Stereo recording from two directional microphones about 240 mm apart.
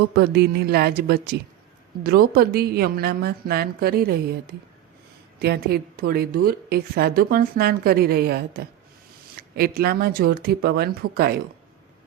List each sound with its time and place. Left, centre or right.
0.1 s a woman's voice: right
5.4 s a woman's voice: right